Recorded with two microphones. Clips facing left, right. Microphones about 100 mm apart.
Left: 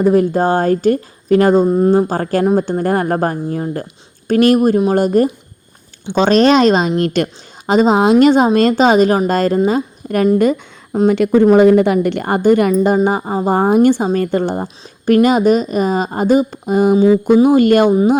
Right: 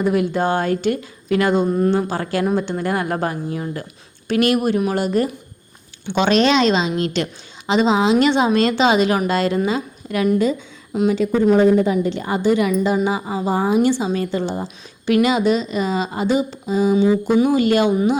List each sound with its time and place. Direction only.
0.0 s speech: 40° left (ahead or behind)
1.6 s a woman's voice: 30° left (ahead or behind); by 10.6 s 55° left (ahead or behind)
11.2 s a woman's voice: 70° left (ahead or behind); by 17.9 s 50° left (ahead or behind)